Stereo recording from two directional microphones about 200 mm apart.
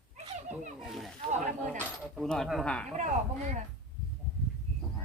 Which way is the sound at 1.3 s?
40° right (ahead or behind).